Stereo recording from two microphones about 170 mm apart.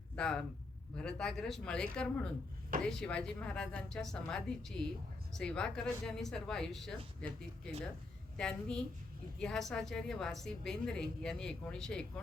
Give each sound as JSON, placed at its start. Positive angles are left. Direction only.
{"t": 0.2, "sound": "a woman's voice", "side_deg": 5}